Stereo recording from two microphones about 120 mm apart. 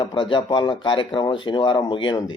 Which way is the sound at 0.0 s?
40° left (ahead or behind).